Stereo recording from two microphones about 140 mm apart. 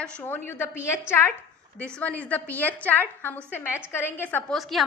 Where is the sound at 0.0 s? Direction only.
10° left (ahead or behind).